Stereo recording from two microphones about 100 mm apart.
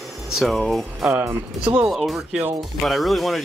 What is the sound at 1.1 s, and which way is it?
Speech, 25° right (ahead or behind).